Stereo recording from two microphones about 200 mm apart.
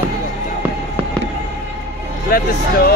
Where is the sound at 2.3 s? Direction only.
50° left (ahead or behind).